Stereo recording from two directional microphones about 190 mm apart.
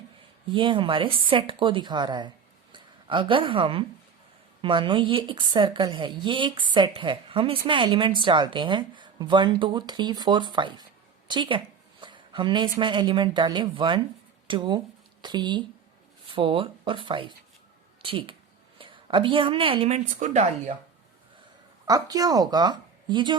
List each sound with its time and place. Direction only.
0.5 s a woman's voice: 25° right (ahead or behind)
21.8 s a woman's voice: 20° right (ahead or behind)